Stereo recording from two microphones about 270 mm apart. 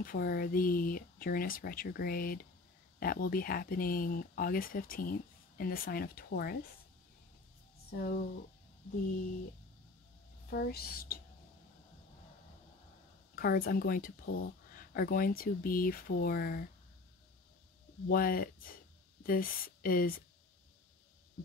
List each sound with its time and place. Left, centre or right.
0.0 s speech: left
7.9 s speech: left
10.5 s speech: left
13.4 s speech: left
18.0 s speech: left